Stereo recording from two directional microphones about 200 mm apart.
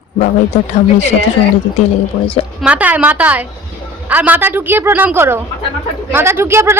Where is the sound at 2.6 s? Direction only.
5° right (ahead or behind).